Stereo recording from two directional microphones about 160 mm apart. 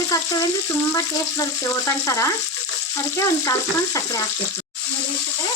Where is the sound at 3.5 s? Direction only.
20° left (ahead or behind).